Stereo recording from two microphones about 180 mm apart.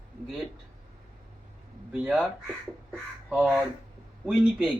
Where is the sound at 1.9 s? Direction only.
5° right (ahead or behind).